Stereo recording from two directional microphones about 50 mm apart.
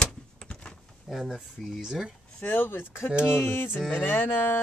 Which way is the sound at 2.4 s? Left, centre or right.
Left.